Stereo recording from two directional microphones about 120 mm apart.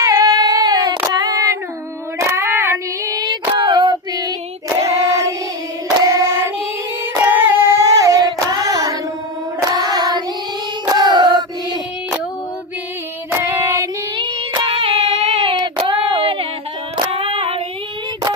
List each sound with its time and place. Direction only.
0.0 s female singing: 30° right (ahead or behind)
4.8 s singing: 25° right (ahead or behind)
9.6 s hands: 30° right (ahead or behind)
10.9 s a sound: 40° right (ahead or behind)
13.4 s female singing: 20° right (ahead or behind)
14.7 s a sound: 60° right (ahead or behind)
15.5 s female singing: 40° right (ahead or behind)